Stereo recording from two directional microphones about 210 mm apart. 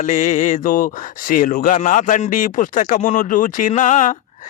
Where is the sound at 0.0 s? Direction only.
35° left (ahead or behind).